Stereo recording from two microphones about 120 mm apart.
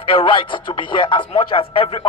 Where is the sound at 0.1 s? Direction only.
45° left (ahead or behind).